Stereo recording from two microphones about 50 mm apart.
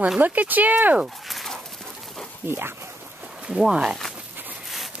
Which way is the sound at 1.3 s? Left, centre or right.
Centre.